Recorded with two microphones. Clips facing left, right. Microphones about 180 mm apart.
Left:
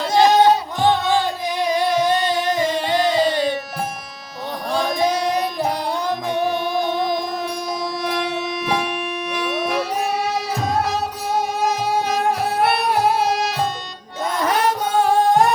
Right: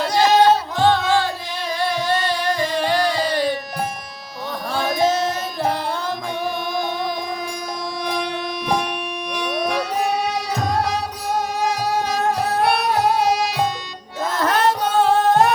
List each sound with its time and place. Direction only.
0.1 s music: 20° left (ahead or behind)
5.0 s music: 15° left (ahead or behind)
6.3 s music: centre (ahead or behind)
8.0 s music: 5° left (ahead or behind)
14.3 s music: 10° left (ahead or behind)